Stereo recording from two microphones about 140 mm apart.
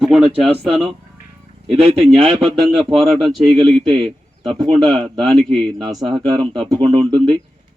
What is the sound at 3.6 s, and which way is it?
A man's voice, 40° right (ahead or behind).